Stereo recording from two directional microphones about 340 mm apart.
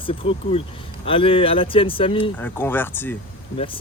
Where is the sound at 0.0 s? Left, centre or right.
Centre.